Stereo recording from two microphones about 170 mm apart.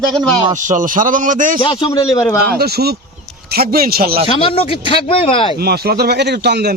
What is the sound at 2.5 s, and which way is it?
A man's voice, 65° right (ahead or behind).